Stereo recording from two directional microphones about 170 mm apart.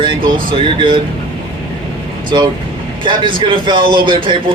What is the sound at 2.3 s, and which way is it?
Speech, 30° right (ahead or behind).